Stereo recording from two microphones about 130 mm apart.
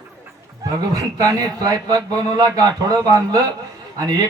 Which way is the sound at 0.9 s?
25° right (ahead or behind).